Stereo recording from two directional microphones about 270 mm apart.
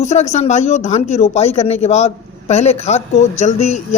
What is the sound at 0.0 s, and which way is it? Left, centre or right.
Speech, left.